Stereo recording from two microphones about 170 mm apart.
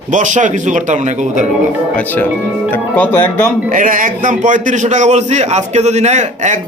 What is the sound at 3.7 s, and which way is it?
A man's voice, 50° right (ahead or behind).